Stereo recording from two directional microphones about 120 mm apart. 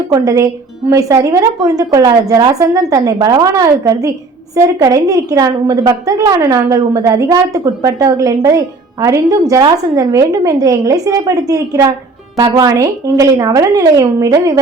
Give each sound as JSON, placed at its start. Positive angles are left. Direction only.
{"t": 0.1, "sound": "a woman's voice", "side_deg": -30}